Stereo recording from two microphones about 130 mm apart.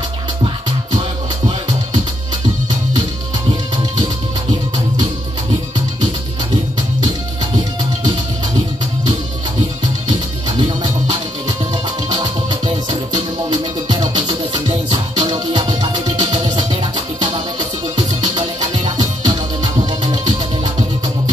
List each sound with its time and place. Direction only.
12.1 s music: 35° right (ahead or behind)